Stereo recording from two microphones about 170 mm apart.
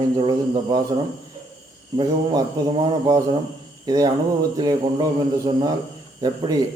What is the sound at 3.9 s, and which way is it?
A man's voice, 20° right (ahead or behind).